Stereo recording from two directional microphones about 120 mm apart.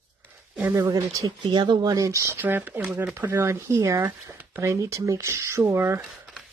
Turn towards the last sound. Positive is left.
turn(degrees=-20)  # may be behind; listen again after turning